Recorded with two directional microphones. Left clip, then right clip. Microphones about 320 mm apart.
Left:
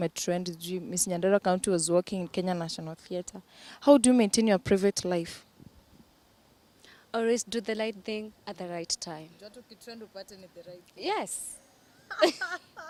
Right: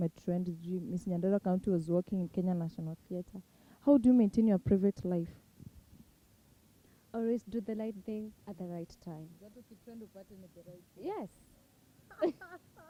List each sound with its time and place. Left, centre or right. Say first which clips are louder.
0.0 s speech: left 7 dB; centre
7.1 s speech: left 8 dB; centre
11.0 s speech: left 10 dB; centre